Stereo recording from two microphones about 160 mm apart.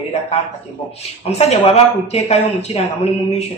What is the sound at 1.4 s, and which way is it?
Speech, 40° left (ahead or behind).